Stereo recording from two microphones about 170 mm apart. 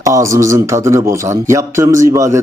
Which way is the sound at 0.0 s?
20° right (ahead or behind).